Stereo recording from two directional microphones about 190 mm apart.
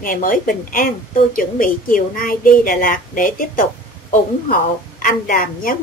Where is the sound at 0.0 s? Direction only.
45° left (ahead or behind).